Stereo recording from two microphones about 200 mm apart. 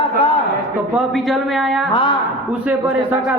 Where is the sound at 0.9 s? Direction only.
Centre (ahead or behind).